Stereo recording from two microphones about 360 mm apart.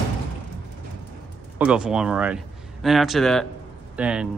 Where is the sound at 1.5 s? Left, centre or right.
Centre.